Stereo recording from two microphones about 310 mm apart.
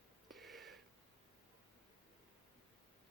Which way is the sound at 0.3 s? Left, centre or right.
Centre.